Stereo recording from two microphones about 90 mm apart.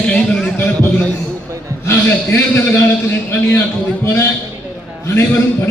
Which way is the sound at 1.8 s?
25° left (ahead or behind).